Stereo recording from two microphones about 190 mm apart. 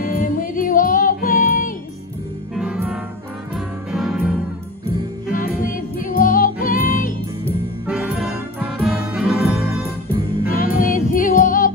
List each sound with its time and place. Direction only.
0.0 s music: 45° left (ahead or behind)
2.5 s music: 5° right (ahead or behind)
5.6 s music: 45° left (ahead or behind)
7.8 s music: 10° right (ahead or behind)
10.5 s music: 50° left (ahead or behind)